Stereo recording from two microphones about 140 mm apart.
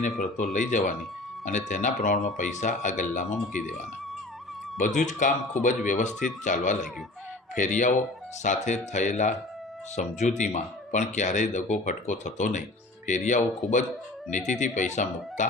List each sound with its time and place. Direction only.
0.5 s speech: 60° left (ahead or behind)
4.8 s speech: 60° left (ahead or behind)